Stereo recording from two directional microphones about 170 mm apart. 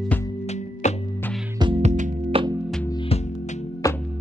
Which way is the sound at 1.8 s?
45° right (ahead or behind).